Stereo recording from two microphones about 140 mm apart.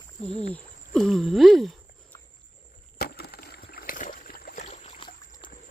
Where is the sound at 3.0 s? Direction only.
90° left.